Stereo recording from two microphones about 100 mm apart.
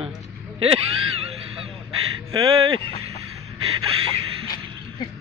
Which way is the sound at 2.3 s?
55° right (ahead or behind).